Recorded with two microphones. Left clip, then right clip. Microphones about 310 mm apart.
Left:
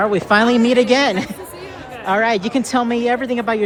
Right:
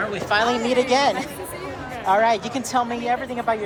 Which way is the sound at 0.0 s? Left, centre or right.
Centre.